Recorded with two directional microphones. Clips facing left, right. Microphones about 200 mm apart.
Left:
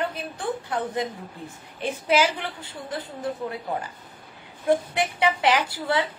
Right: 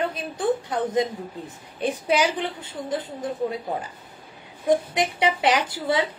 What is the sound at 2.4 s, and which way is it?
Speech, 20° right (ahead or behind).